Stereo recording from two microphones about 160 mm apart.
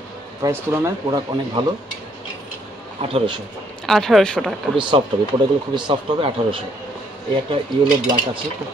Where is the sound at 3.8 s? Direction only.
Centre (ahead or behind).